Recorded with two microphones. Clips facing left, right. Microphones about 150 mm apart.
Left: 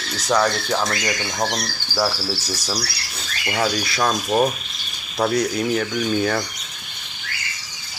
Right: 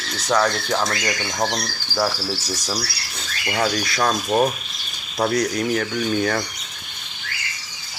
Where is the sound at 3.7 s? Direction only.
25° left (ahead or behind).